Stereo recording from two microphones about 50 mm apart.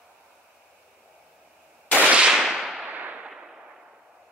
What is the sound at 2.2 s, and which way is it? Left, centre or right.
Whip, centre.